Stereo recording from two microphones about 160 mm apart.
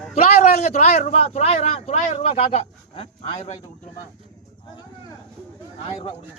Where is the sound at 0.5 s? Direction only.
45° left (ahead or behind).